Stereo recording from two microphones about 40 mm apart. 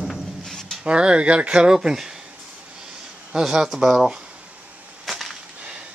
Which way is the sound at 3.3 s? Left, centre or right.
Centre.